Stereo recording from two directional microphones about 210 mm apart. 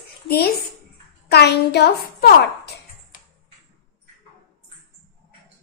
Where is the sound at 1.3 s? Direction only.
50° left (ahead or behind).